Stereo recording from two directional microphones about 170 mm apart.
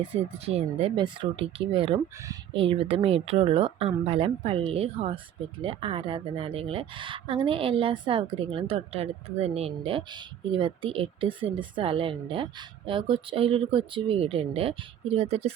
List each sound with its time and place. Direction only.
0.0 s speech: 35° right (ahead or behind)